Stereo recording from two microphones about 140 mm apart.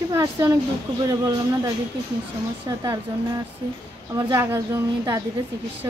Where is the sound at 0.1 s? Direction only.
20° right (ahead or behind).